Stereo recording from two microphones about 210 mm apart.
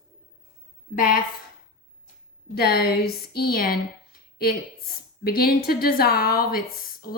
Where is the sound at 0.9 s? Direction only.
40° left (ahead or behind).